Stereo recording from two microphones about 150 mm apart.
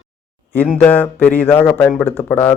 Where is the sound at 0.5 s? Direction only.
10° left (ahead or behind).